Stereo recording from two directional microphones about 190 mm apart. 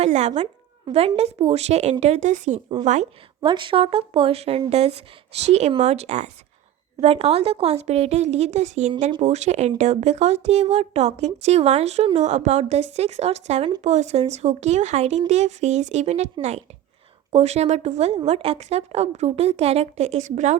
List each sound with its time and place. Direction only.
0.0 s speech: 35° right (ahead or behind)
3.4 s speech: 25° right (ahead or behind)